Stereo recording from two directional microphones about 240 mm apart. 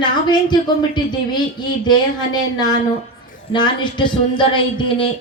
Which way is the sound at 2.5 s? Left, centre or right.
Centre.